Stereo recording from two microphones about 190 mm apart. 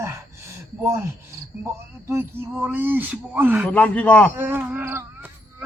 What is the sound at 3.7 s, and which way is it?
Speech, 10° left (ahead or behind).